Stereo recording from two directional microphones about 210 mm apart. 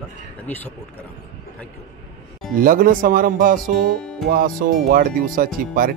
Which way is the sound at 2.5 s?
40° right (ahead or behind).